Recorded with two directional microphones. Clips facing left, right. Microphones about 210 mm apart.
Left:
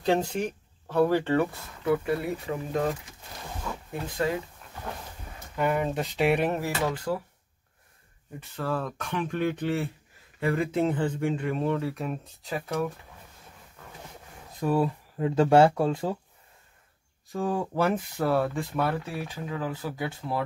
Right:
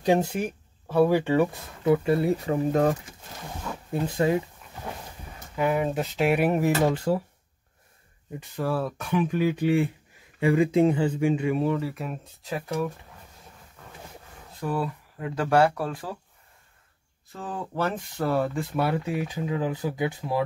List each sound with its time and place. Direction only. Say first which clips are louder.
0.0 s speech: right 2 dB; 10° right (ahead or behind); by 3.0 s 40° right (ahead or behind)
4.1 s speech: right 4 dB; 20° right (ahead or behind)
5.6 s speech: right 2 dB; 5° right (ahead or behind)
6.8 s speech: right 5 dB; 25° right (ahead or behind)
8.4 s speech: right 3 dB; 10° right (ahead or behind)
14.6 s speech: left 4 dB; 25° left (ahead or behind)
17.3 s speech: left 6 dB; 10° left (ahead or behind); by 20.4 s 15° right (ahead or behind)